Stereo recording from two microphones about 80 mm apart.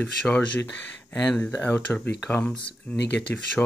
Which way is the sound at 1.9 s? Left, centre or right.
Centre.